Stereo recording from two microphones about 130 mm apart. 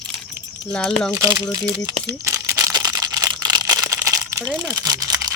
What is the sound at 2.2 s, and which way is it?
Single-lens reflex camera, 25° right (ahead or behind).